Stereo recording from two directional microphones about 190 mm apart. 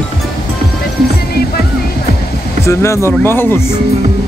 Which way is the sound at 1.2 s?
55° left (ahead or behind).